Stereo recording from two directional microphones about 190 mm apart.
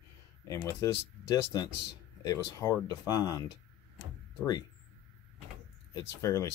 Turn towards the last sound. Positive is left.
turn(degrees=15)  # may be behind; listen again after turning